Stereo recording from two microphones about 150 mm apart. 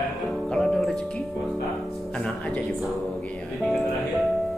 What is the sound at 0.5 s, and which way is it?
Music, 5° left (ahead or behind).